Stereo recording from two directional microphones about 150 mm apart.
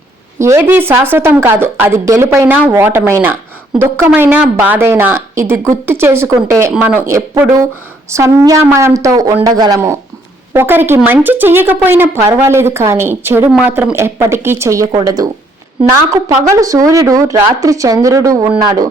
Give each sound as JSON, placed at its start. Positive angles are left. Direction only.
{"t": 0.3, "sound": "a woman's voice", "side_deg": -15}
{"t": 16.4, "sound": "speech", "side_deg": -20}